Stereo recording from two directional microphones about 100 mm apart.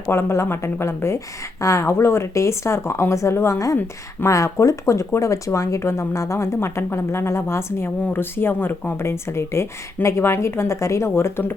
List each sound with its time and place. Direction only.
0.1 s speech: 25° left (ahead or behind)